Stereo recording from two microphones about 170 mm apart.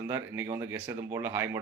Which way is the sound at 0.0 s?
15° right (ahead or behind).